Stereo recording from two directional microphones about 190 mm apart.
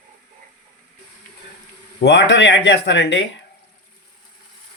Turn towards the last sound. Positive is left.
turn(degrees=70)  # may be behind; listen again after turning